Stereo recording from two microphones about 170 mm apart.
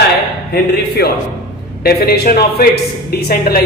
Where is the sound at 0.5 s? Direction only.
65° left (ahead or behind).